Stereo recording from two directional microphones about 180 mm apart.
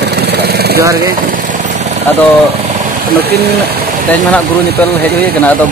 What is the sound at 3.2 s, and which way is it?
Speech, 60° right (ahead or behind).